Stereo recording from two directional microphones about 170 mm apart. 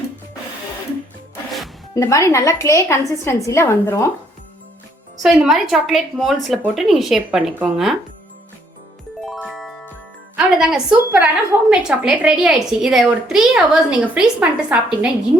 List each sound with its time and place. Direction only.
2.0 s a woman's voice: 20° left (ahead or behind)
5.2 s a woman's voice: centre (ahead or behind)
9.2 s music: centre (ahead or behind)
10.3 s a woman's voice: centre (ahead or behind)